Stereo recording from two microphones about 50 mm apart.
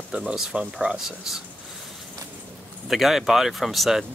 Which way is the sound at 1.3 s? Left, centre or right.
Centre.